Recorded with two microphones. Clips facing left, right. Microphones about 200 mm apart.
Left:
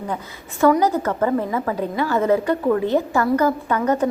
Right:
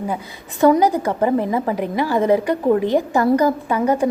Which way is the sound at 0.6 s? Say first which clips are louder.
Right 2 dB; 15° right (ahead or behind).